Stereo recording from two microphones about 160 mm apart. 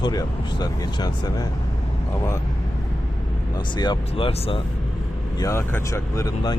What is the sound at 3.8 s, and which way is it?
Speech, 30° left (ahead or behind).